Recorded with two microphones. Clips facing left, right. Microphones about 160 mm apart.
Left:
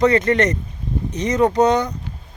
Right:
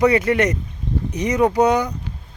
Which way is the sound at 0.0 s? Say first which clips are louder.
Even; 10° right (ahead or behind).